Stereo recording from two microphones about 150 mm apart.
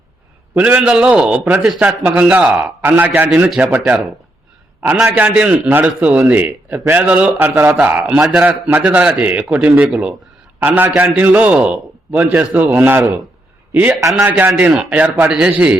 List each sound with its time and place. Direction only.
0.5 s a man's voice: 10° right (ahead or behind)
5.0 s a man's voice: 10° right (ahead or behind)